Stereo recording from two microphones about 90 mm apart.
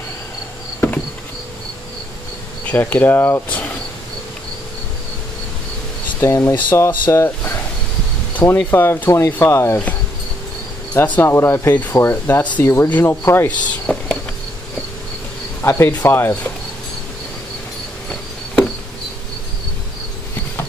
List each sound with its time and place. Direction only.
0.7 s insect: 20° left (ahead or behind)
2.6 s speech: 20° left (ahead or behind)
6.2 s speech: 35° left (ahead or behind)
11.0 s speech: 25° left (ahead or behind)
13.5 s a sound: 10° left (ahead or behind)
15.6 s speech: 30° left (ahead or behind)